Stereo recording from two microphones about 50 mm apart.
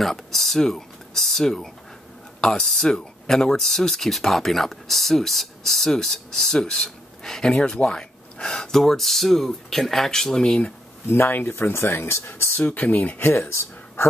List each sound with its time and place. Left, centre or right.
0.0 s speech: centre
11.2 s speech: left
11.5 s speech: left
12.7 s speech: left
13.3 s speech: left